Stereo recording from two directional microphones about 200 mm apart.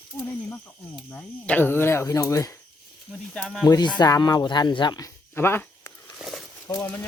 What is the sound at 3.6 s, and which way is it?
Speech, 20° left (ahead or behind).